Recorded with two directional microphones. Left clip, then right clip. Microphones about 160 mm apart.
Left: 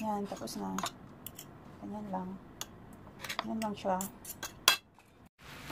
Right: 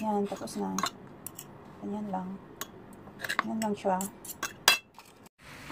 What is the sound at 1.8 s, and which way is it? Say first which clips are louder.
Speech: right 6 dB; 15° left (ahead or behind).